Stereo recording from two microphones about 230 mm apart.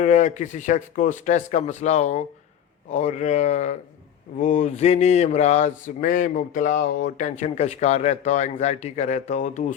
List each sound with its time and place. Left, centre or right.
0.0 s speech: left
4.4 s mantra: left